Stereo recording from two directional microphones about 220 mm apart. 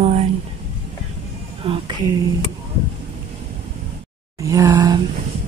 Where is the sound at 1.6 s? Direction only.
25° right (ahead or behind).